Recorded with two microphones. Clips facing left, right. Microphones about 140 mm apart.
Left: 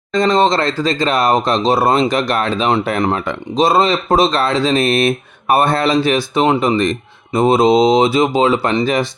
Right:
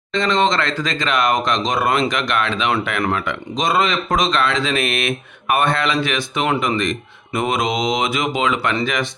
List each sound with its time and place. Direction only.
0.1 s speech: 40° left (ahead or behind)